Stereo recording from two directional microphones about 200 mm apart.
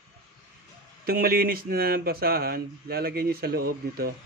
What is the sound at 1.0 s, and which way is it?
Speech, 50° right (ahead or behind).